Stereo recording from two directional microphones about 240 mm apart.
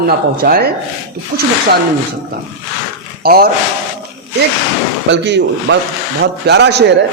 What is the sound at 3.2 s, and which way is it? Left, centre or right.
Speech, right.